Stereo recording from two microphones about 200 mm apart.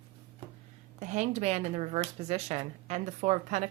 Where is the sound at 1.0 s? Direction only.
35° right (ahead or behind).